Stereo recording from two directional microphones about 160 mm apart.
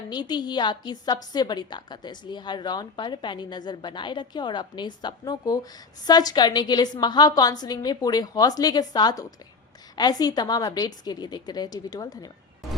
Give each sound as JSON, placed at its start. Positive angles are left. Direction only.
{"t": 0.1, "sound": "a woman's voice", "side_deg": 25}